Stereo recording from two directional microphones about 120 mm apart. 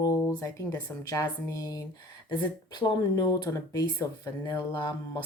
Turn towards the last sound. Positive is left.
turn(degrees=40)  # may be behind; listen again after turning